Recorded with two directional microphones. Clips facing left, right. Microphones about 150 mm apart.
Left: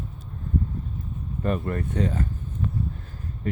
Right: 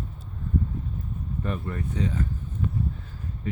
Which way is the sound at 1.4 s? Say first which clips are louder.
Left 6 dB; 55° left (ahead or behind).